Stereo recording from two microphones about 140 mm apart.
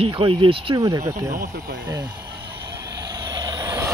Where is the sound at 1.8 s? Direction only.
30° right (ahead or behind).